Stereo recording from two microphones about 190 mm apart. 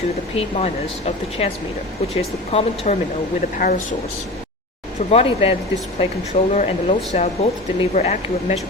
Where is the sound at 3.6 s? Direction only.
45° left (ahead or behind).